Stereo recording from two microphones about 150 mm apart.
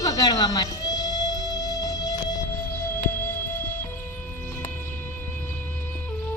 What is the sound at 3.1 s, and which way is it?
Music, 15° left (ahead or behind).